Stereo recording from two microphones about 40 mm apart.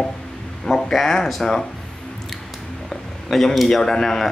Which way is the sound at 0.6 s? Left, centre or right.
Centre.